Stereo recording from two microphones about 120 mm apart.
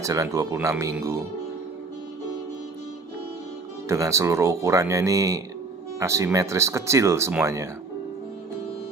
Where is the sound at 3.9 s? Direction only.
25° right (ahead or behind).